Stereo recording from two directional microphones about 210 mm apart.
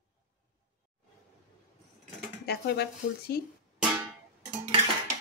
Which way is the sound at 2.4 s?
50° left (ahead or behind).